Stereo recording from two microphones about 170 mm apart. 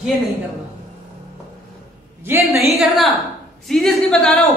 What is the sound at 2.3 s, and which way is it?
Speech, 15° right (ahead or behind).